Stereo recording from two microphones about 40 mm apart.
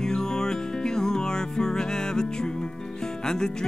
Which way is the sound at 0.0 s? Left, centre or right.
Centre.